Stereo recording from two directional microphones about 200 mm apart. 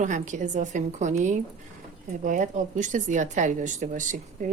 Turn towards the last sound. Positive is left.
turn(degrees=-40)  # may be behind; listen again after turning